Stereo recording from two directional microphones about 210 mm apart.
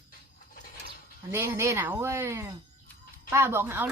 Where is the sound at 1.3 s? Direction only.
10° right (ahead or behind).